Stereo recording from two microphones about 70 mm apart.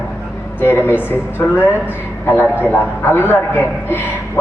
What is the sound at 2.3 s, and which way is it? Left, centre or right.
A man's voice, left.